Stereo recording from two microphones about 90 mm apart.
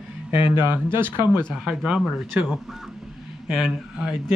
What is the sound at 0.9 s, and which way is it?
Speech, 25° right (ahead or behind).